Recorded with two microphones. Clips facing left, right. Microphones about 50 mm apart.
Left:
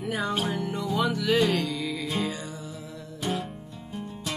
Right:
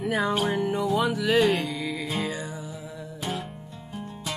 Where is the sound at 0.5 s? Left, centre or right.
Centre.